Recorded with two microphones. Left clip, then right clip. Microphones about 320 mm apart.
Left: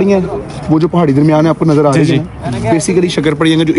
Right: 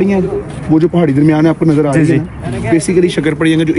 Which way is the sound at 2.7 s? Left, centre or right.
Left.